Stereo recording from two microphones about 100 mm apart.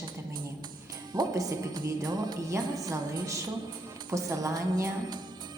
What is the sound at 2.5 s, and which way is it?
Speech, 35° right (ahead or behind).